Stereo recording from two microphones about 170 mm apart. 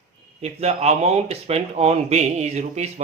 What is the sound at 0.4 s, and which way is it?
Speech, 40° right (ahead or behind).